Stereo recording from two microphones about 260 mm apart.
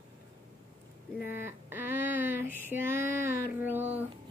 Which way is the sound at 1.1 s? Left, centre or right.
Centre.